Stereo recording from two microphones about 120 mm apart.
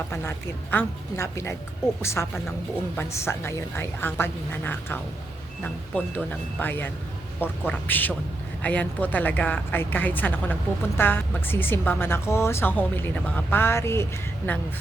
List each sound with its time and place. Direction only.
0.1 s a woman's voice: 20° left (ahead or behind)